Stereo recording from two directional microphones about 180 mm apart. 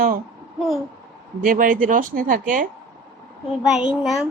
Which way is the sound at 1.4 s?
50° right (ahead or behind).